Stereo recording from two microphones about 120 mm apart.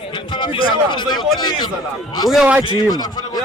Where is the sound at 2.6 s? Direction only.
40° left (ahead or behind).